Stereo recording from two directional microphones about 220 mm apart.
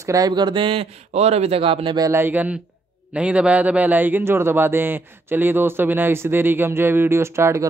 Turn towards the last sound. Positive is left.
turn(degrees=-15)  # may be behind; listen again after turning